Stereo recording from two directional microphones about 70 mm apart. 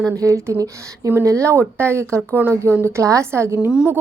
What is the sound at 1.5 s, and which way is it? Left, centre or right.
A woman's voice, right.